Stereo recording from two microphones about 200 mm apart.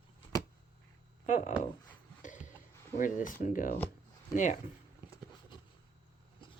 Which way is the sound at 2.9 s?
40° left (ahead or behind).